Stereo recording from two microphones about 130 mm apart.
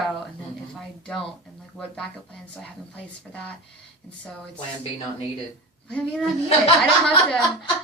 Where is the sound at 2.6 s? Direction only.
10° left (ahead or behind).